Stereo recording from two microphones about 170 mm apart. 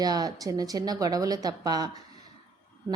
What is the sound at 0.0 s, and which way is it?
Speech, 20° right (ahead or behind).